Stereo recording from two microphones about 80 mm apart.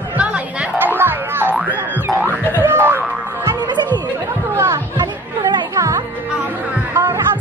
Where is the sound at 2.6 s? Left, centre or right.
Right.